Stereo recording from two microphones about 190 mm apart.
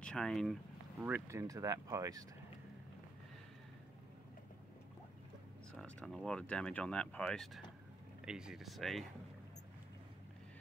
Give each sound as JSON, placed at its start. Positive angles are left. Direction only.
{"t": 0.0, "sound": "speech", "side_deg": 5}
{"t": 1.0, "sound": "speech", "side_deg": -10}
{"t": 5.8, "sound": "speech", "side_deg": 5}